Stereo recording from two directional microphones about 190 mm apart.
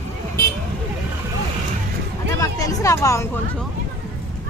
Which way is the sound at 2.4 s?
20° left (ahead or behind).